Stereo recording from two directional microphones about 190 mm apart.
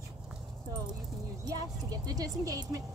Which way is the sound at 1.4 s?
20° right (ahead or behind).